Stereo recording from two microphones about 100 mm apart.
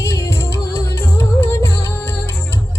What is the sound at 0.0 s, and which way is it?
Music, 30° left (ahead or behind).